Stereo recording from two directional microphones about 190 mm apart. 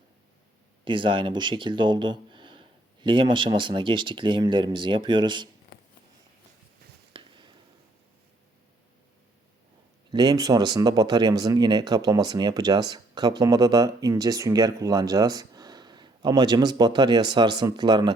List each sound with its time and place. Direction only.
0.9 s speech: 25° right (ahead or behind)
7.1 s a sound: 25° right (ahead or behind)
10.1 s speech: 20° right (ahead or behind)